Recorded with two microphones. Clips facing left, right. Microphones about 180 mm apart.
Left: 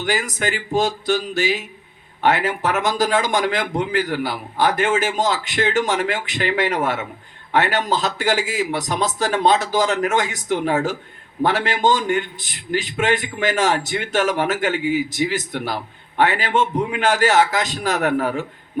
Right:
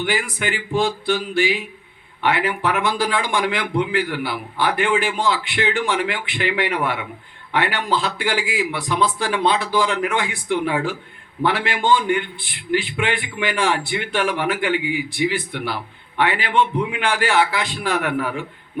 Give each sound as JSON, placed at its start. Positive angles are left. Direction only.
{"t": 0.0, "sound": "music", "side_deg": 40}
{"t": 2.2, "sound": "a man's voice", "side_deg": 40}